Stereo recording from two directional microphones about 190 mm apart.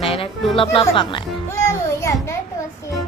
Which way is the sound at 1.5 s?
15° left (ahead or behind).